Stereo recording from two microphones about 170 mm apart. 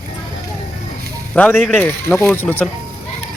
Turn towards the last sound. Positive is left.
turn(degrees=10)  # may be behind; listen again after turning